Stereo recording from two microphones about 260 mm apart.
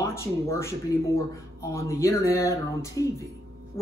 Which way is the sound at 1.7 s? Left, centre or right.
Centre.